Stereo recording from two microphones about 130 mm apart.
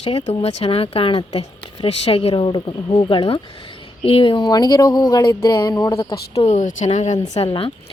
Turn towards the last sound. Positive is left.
turn(degrees=45)  # may be behind; listen again after turning